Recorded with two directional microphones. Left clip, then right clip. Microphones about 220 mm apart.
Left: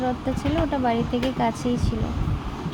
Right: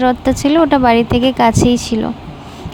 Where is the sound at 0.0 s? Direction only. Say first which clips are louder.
Right 12 dB; 45° right (ahead or behind).